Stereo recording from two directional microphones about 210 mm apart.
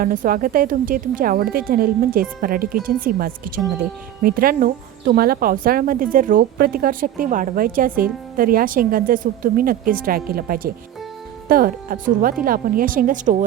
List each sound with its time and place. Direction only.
0.0 s speech: 40° right (ahead or behind)